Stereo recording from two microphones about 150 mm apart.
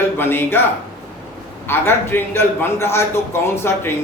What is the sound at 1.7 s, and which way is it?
Speech, 15° left (ahead or behind).